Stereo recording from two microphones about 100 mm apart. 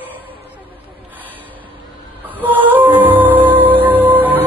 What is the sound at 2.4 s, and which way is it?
Music, 15° right (ahead or behind).